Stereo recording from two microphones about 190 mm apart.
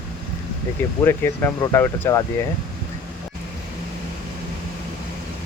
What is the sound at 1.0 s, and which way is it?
Speech, 10° left (ahead or behind).